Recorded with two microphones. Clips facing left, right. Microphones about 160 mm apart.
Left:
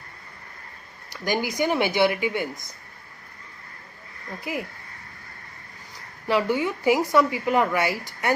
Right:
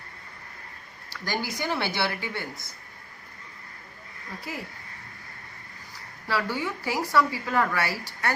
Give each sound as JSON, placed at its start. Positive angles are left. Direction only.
{"t": 1.1, "sound": "speech", "side_deg": 15}
{"t": 4.5, "sound": "speech", "side_deg": 15}
{"t": 6.2, "sound": "a woman's voice", "side_deg": 20}